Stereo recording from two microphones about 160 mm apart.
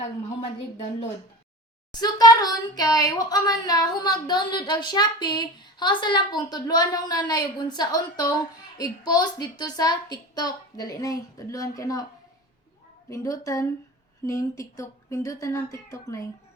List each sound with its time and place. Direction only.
1.9 s speech: 25° left (ahead or behind)
13.1 s speech: 20° left (ahead or behind)